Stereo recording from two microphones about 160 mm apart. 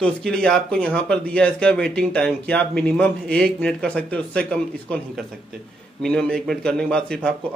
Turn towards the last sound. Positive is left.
turn(degrees=5)  # may be behind; listen again after turning